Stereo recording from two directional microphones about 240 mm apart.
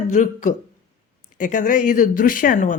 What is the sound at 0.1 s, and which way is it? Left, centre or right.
Speech, left.